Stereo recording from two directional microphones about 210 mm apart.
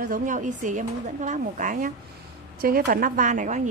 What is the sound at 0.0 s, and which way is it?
A woman's voice, 40° right (ahead or behind).